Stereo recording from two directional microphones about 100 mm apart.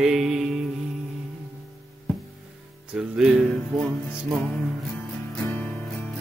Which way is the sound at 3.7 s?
Centre (ahead or behind).